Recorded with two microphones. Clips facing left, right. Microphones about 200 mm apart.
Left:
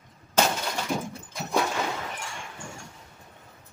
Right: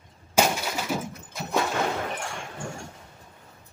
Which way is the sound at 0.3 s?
10° right (ahead or behind).